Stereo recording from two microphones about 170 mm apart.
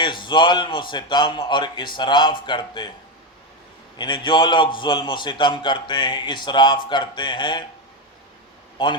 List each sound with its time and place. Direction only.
0.0 s a man's voice: 30° left (ahead or behind)
3.9 s a man's voice: 30° left (ahead or behind)
8.8 s a man's voice: 25° left (ahead or behind)